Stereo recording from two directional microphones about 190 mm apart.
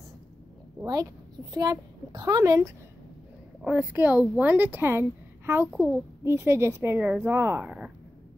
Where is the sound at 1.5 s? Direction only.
20° right (ahead or behind).